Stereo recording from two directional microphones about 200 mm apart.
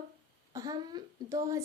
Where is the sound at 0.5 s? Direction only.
20° right (ahead or behind).